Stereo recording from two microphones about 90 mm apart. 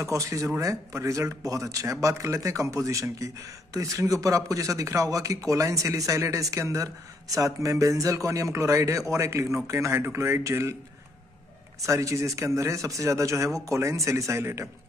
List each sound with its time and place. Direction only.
0.0 s a man's voice: 35° right (ahead or behind)
11.8 s speech: 35° right (ahead or behind)